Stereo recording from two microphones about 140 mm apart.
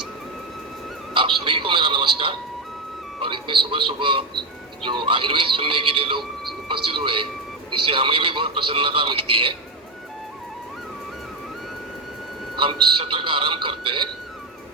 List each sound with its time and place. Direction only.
1.1 s speech: 35° right (ahead or behind)
12.5 s speech: 40° right (ahead or behind)